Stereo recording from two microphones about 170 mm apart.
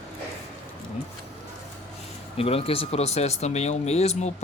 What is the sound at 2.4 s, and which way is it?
Speech, 35° left (ahead or behind).